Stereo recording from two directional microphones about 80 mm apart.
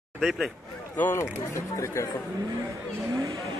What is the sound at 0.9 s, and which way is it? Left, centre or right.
Speech, left.